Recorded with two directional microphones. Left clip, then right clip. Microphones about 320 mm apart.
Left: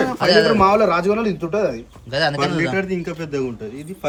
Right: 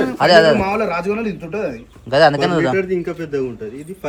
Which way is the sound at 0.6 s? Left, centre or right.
Left.